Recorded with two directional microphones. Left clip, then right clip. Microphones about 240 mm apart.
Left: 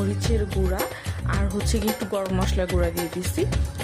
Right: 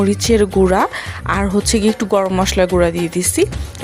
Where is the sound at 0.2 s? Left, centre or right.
Right.